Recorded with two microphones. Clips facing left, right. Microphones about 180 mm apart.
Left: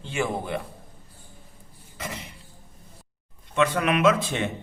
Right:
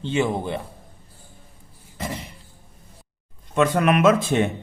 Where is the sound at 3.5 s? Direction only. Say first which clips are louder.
Right 4 dB; 45° right (ahead or behind).